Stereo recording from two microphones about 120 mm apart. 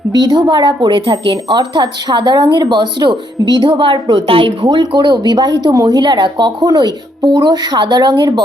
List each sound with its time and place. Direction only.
0.1 s speech: 35° right (ahead or behind)